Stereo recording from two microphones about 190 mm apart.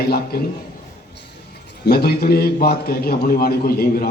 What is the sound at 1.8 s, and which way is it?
A man's voice, 55° left (ahead or behind).